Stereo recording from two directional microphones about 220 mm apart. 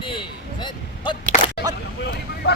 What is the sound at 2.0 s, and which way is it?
Vehicle, 50° left (ahead or behind).